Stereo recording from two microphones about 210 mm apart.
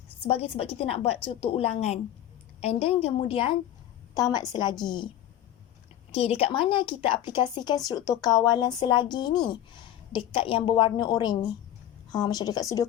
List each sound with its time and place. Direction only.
0.3 s a woman's voice: 30° left (ahead or behind)
6.1 s a woman's voice: 30° left (ahead or behind)